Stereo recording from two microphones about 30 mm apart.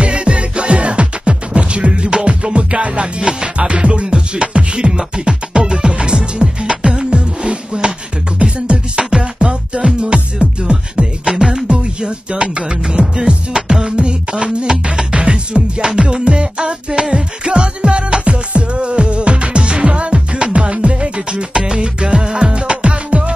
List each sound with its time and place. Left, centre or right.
0.0 s music: right
3.2 s music: right
22.5 s music: right